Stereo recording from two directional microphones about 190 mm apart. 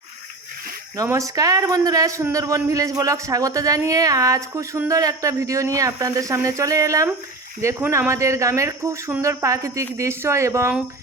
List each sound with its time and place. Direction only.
0.9 s a man's voice: 15° right (ahead or behind)